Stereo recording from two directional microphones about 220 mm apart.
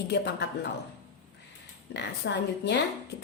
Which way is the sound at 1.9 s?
50° left (ahead or behind).